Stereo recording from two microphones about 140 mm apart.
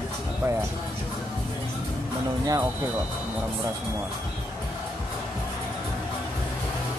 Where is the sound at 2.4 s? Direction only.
25° right (ahead or behind).